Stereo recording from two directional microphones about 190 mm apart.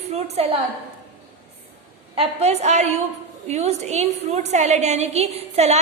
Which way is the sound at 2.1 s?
35° right (ahead or behind).